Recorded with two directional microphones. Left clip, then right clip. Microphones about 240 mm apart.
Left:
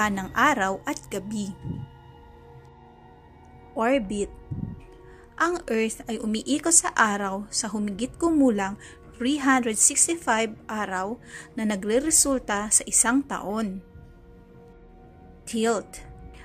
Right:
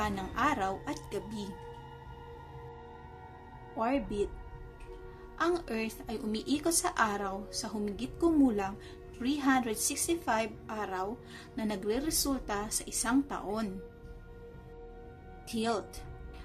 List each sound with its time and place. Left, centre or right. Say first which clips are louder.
0.0 s a woman's voice: left 9 dB; left
3.7 s a woman's voice: left 8 dB; left
5.4 s a woman's voice: left 8 dB; left
13.5 s speech: left 6 dB; centre